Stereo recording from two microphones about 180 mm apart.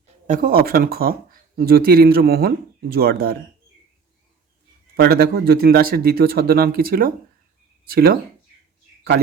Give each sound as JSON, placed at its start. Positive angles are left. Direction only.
{"t": 0.3, "sound": "speech", "side_deg": -55}
{"t": 4.9, "sound": "speech", "side_deg": -60}